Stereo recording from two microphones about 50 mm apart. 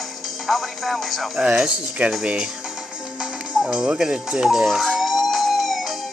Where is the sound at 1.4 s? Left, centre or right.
Centre.